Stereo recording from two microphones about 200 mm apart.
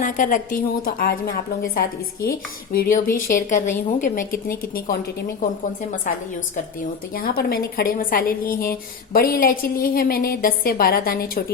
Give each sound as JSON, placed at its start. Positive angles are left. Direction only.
{"t": 0.0, "sound": "a woman's voice", "side_deg": 40}
{"t": 7.1, "sound": "a woman's voice", "side_deg": 45}